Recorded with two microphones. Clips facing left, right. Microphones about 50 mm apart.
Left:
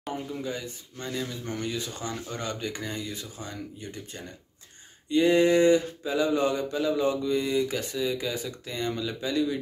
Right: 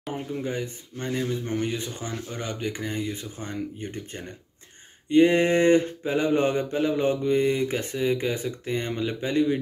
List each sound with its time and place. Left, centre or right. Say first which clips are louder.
0.1 s mantra: right 3 dB; right
1.6 s speech: right 3 dB; right
5.1 s mantra: right 2 dB; right